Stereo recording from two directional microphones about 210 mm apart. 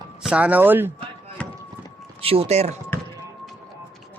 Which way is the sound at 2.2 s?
25° right (ahead or behind).